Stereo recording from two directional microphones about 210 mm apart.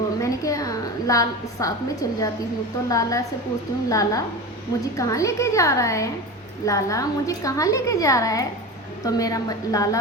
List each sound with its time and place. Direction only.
0.2 s a woman's voice: 15° left (ahead or behind)